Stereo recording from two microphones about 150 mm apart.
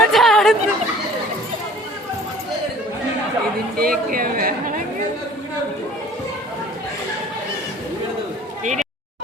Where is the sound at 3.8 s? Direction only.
75° right (ahead or behind).